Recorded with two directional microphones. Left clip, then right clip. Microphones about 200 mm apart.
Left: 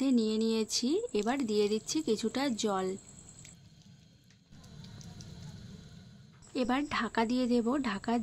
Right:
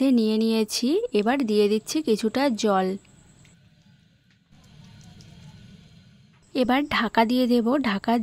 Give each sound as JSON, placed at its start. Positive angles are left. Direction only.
{"t": 0.0, "sound": "speech", "side_deg": -45}
{"t": 6.5, "sound": "a woman's voice", "side_deg": -40}